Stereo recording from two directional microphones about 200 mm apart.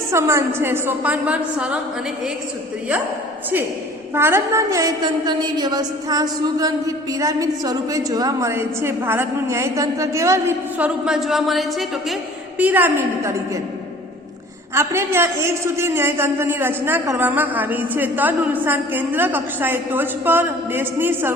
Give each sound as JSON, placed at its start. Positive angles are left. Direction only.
{"t": 0.1, "sound": "a woman's voice", "side_deg": -15}
{"t": 4.1, "sound": "a woman's voice", "side_deg": -10}
{"t": 14.8, "sound": "a woman's voice", "side_deg": -15}